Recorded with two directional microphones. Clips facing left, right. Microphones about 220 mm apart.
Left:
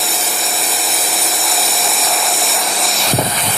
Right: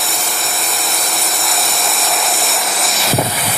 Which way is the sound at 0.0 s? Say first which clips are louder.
Left 1 dB; centre (ahead or behind).